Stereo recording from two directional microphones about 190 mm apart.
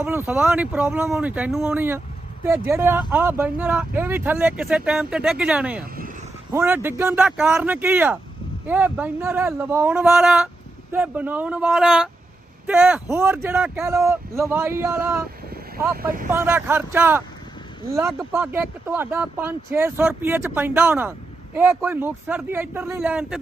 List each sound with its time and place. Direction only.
0.0 s speech: 10° right (ahead or behind)
16.0 s speech: 45° right (ahead or behind)
16.3 s speech: 10° right (ahead or behind)
18.3 s speech: 10° right (ahead or behind)